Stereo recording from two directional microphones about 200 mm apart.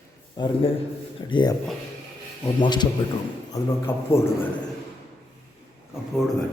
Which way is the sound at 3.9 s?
10° left (ahead or behind).